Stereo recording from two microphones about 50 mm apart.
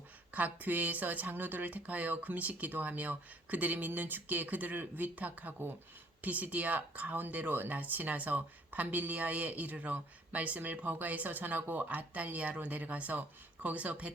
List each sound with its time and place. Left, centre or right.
0.3 s speech: right